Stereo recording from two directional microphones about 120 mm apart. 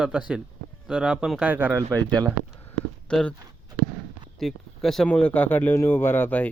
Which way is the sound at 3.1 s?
10° left (ahead or behind).